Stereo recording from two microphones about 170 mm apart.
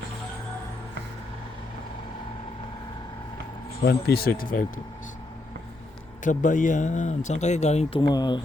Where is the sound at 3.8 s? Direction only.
65° left (ahead or behind).